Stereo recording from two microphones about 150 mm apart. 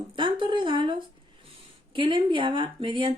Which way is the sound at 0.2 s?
35° right (ahead or behind).